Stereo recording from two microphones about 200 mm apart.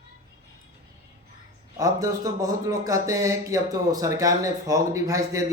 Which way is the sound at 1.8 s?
15° right (ahead or behind).